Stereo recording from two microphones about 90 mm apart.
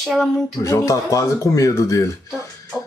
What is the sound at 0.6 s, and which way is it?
Speech, 40° left (ahead or behind).